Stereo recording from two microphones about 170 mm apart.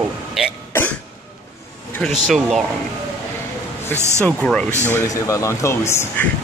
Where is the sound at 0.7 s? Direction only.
10° left (ahead or behind).